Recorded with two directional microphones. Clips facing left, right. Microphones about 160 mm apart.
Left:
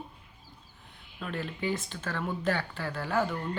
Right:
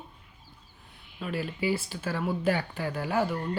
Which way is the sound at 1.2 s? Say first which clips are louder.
Right 3 dB; 5° right (ahead or behind).